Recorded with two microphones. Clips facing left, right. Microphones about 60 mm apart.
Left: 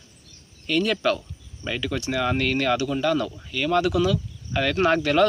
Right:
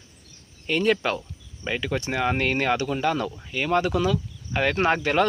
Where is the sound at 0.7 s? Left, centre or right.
Right.